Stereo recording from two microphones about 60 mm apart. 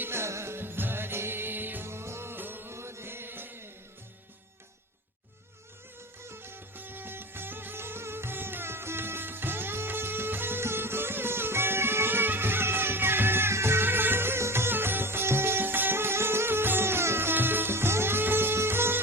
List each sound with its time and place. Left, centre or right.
0.0 s music: right
2.7 s chant: right
6.2 s music: right